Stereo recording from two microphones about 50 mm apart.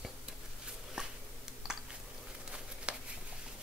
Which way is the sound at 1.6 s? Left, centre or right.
Centre.